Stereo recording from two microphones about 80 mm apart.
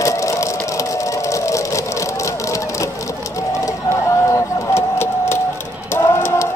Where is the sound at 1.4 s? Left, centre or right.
Left.